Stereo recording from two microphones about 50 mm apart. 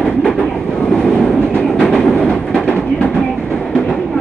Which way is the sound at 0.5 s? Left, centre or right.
Centre.